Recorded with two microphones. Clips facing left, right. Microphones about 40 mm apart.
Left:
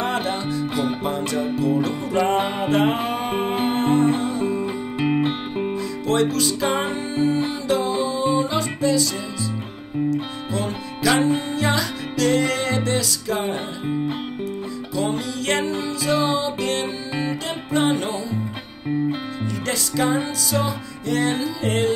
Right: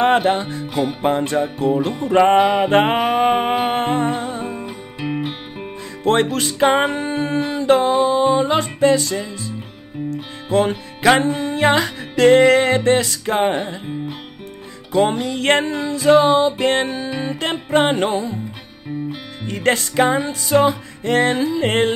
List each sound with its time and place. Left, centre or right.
0.0 s music: right
4.9 s music: centre
6.3 s music: right
10.5 s music: right
15.0 s music: right
19.4 s music: right